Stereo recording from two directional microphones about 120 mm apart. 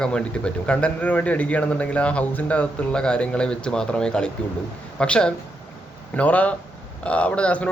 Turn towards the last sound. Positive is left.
turn(degrees=10)  # may be behind; listen again after turning